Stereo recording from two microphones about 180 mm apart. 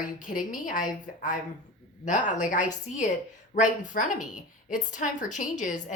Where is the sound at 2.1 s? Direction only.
45° left (ahead or behind).